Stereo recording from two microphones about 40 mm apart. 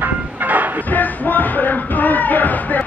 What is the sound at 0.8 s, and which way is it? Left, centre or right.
Music, left.